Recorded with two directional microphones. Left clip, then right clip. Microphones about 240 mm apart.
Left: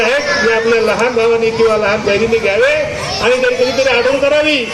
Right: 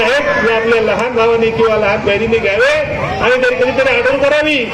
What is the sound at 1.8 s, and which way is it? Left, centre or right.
Speech, left.